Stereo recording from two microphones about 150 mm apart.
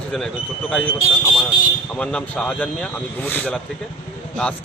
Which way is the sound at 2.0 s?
5° left (ahead or behind).